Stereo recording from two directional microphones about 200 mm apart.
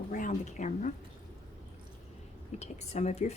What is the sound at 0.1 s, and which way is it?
Speech, 40° left (ahead or behind).